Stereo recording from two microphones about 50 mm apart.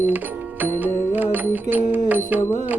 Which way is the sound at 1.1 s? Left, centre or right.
Right.